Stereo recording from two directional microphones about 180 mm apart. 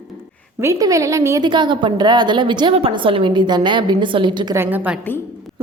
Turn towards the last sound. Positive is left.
turn(degrees=-10)  # may be behind; listen again after turning